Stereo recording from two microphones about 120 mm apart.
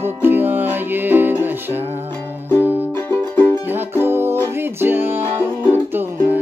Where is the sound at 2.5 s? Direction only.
20° left (ahead or behind).